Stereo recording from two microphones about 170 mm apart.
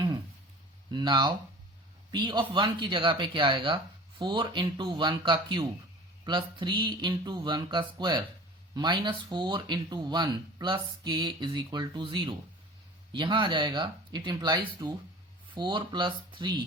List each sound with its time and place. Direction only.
0.9 s speech: 25° right (ahead or behind)